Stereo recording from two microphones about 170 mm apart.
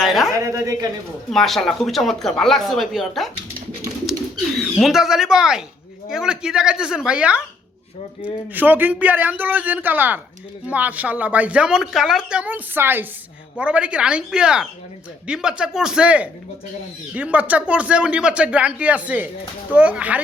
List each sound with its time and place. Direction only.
0.0 s speech: centre (ahead or behind)
0.4 s speech: 20° right (ahead or behind)
1.3 s speech: centre (ahead or behind)
4.5 s speech: centre (ahead or behind)